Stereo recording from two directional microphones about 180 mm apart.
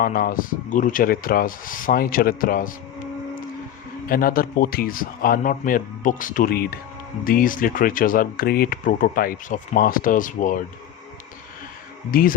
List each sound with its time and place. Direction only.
0.0 s speech: 50° left (ahead or behind)
4.1 s speech: 55° left (ahead or behind)
12.1 s speech: 55° left (ahead or behind)